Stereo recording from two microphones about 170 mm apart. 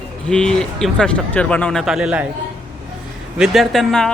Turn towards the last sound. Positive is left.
turn(degrees=5)  # may be behind; listen again after turning